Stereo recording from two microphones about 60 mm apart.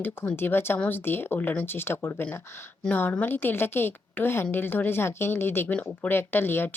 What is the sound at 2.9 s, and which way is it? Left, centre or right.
A woman's voice, left.